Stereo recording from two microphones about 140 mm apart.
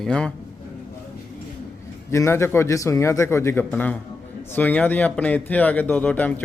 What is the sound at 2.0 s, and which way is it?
A man's voice, 20° left (ahead or behind).